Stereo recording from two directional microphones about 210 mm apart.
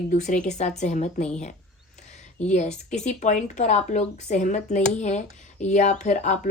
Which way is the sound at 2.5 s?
35° left (ahead or behind).